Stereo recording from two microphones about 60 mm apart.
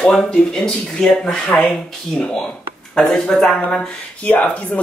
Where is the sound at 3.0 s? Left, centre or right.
Centre.